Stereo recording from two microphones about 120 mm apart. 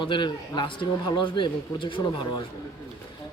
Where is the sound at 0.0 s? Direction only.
40° left (ahead or behind).